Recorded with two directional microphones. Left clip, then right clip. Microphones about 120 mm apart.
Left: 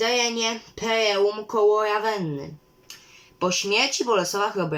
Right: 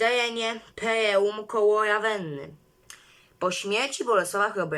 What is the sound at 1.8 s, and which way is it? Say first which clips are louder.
Speech: left 1 dB; 50° left (ahead or behind).